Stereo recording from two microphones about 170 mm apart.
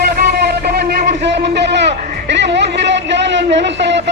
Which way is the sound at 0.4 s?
70° right (ahead or behind).